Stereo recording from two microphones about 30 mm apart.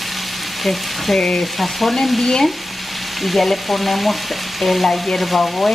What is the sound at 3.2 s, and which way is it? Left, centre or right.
Frying, centre.